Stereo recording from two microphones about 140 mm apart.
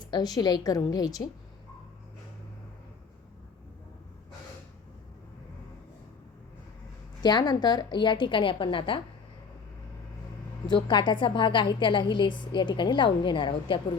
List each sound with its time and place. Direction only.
0.0 s a woman's voice: 30° left (ahead or behind)
7.2 s a woman's voice: 30° left (ahead or behind)
10.7 s a woman's voice: 35° left (ahead or behind)